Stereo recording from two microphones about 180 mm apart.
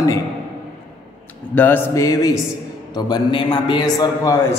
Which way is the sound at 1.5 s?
10° left (ahead or behind).